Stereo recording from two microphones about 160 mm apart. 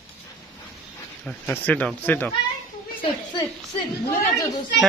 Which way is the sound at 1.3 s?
10° left (ahead or behind).